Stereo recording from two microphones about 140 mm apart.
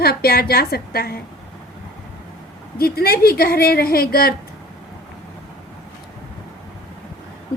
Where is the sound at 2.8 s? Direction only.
90° left.